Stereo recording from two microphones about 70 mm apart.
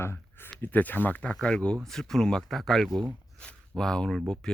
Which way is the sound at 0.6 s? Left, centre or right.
Left.